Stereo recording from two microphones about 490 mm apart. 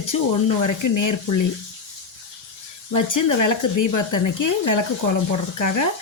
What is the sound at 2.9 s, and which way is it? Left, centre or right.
Speech, left.